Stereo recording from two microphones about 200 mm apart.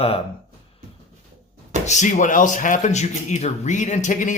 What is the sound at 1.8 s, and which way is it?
Speech, 35° left (ahead or behind).